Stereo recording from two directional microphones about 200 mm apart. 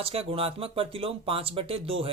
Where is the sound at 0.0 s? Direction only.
30° right (ahead or behind).